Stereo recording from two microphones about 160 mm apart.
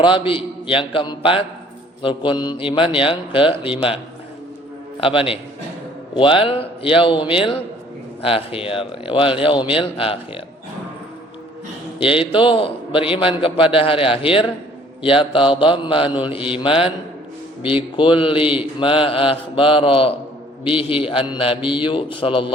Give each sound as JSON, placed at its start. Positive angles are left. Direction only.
{"t": 0.0, "sound": "mantra", "side_deg": 30}
{"t": 4.9, "sound": "mantra", "side_deg": 35}
{"t": 11.9, "sound": "mantra", "side_deg": 35}